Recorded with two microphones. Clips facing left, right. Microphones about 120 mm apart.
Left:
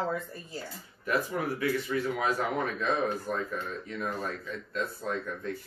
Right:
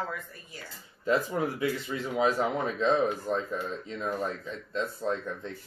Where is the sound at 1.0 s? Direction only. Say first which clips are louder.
Right 3 dB; 25° right (ahead or behind).